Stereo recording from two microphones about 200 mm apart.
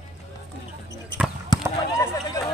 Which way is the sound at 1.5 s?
20° left (ahead or behind).